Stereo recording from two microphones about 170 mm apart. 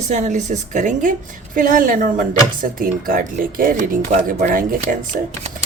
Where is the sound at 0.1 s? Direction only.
45° right (ahead or behind).